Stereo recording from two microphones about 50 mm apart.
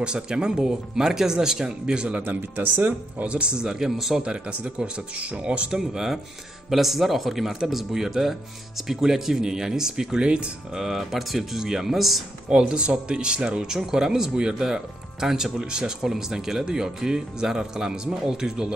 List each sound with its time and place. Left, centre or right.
0.0 s speech: centre
2.2 s speech: right
3.3 s speech: right
4.2 s speech: centre
5.8 s speech: centre
12.4 s speech: centre